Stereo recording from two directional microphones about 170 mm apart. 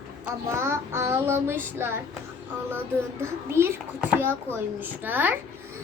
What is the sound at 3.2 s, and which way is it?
Child singing, 15° right (ahead or behind).